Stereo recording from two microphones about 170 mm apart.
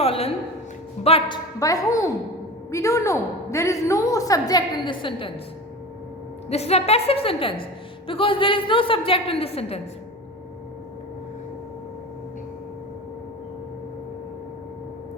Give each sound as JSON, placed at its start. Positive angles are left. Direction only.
{"t": 0.0, "sound": "a sound", "side_deg": 35}
{"t": 1.0, "sound": "a woman's voice", "side_deg": 35}
{"t": 1.5, "sound": "a woman's voice", "side_deg": 20}
{"t": 6.5, "sound": "a woman's voice", "side_deg": 40}